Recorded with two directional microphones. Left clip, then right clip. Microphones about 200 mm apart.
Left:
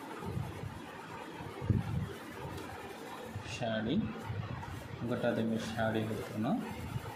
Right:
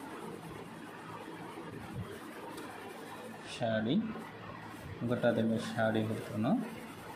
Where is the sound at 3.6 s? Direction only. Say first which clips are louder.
Right 3 dB; 15° right (ahead or behind).